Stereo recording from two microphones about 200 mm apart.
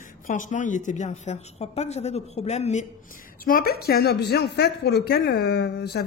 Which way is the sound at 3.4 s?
50° left (ahead or behind).